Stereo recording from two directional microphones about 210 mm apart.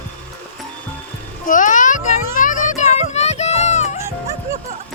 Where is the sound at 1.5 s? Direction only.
40° left (ahead or behind).